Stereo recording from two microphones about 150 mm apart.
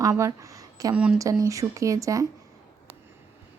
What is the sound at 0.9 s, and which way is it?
Speech, 5° right (ahead or behind).